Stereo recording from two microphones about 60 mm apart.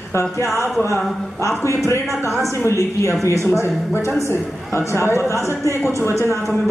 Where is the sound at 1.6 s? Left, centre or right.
Left.